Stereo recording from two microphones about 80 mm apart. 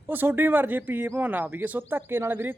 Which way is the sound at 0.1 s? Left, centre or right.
Right.